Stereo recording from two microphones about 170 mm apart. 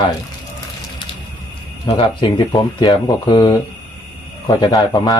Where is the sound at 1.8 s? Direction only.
30° left (ahead or behind).